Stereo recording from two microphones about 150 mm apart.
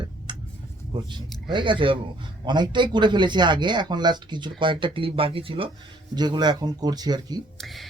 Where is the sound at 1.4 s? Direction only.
30° right (ahead or behind).